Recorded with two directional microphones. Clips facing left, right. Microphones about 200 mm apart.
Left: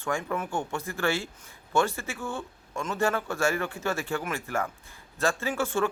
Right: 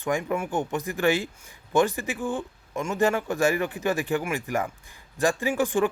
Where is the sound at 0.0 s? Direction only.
15° right (ahead or behind).